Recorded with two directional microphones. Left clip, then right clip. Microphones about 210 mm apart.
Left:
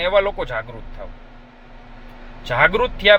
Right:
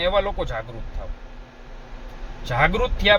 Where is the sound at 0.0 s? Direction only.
10° right (ahead or behind).